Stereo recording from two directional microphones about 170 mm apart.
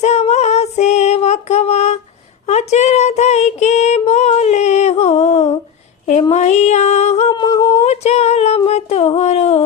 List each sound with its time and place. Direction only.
0.0 s female singing: 40° left (ahead or behind)
6.3 s music: 40° left (ahead or behind)
7.3 s humming: 20° left (ahead or behind)
7.8 s female singing: 40° left (ahead or behind)